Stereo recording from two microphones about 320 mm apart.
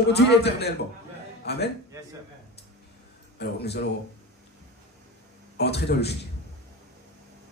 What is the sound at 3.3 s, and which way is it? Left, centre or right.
Speech, left.